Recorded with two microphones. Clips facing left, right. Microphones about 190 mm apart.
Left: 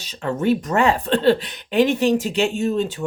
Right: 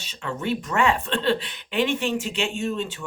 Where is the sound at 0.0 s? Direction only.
40° left (ahead or behind).